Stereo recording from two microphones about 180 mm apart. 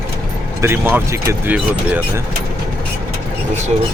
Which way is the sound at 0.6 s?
10° right (ahead or behind).